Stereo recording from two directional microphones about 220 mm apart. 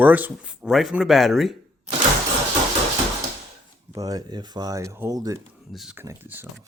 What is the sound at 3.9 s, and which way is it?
Speech, 15° right (ahead or behind).